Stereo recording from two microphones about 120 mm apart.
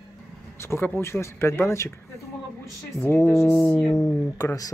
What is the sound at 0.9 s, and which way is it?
Speech, 20° left (ahead or behind).